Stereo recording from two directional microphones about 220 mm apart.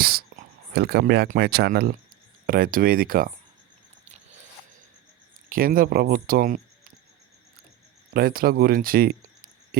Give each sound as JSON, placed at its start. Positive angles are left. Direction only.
{"t": 0.0, "sound": "a sound", "side_deg": -45}
{"t": 0.7, "sound": "speech", "side_deg": -45}
{"t": 5.5, "sound": "speech", "side_deg": -40}
{"t": 8.1, "sound": "speech", "side_deg": -45}